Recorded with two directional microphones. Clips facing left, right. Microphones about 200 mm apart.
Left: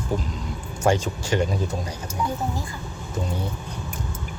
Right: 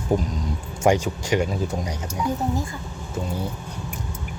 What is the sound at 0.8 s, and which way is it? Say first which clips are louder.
Speech: right 2 dB; 15° right (ahead or behind).